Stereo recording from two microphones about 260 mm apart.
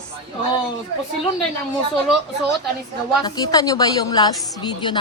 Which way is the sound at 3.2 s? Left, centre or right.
Centre.